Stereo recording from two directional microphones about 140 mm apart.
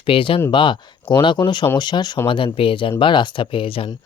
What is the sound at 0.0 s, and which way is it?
Speech, 40° left (ahead or behind).